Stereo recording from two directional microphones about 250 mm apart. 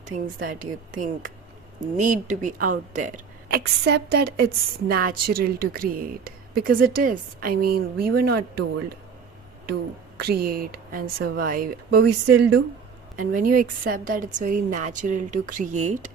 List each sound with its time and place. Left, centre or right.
0.4 s speech: right
10.2 s speech: right